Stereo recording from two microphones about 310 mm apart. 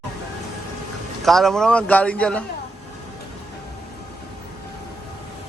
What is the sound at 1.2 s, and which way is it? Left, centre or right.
A man's voice, centre.